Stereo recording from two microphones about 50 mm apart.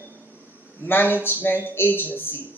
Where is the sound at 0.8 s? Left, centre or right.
Left.